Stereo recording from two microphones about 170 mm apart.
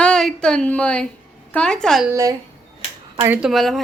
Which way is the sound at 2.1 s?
20° right (ahead or behind).